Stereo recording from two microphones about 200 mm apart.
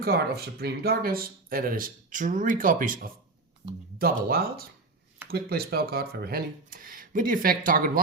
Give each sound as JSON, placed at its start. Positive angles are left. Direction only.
{"t": 0.0, "sound": "speech", "side_deg": -50}